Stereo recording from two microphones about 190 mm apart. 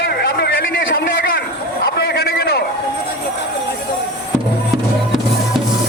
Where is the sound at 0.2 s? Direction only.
60° left (ahead or behind).